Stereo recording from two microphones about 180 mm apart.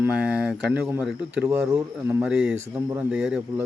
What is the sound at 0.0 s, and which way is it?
Speech, 5° right (ahead or behind).